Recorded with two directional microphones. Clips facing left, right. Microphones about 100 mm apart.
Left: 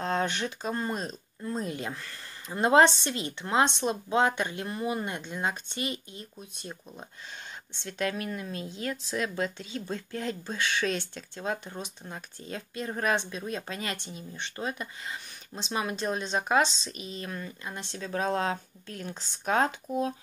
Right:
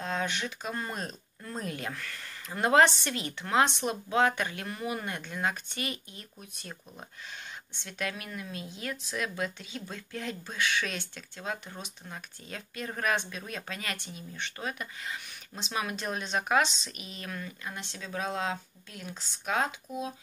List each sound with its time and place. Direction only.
0.0 s speech: 40° left (ahead or behind)
7.8 s speech: 35° left (ahead or behind)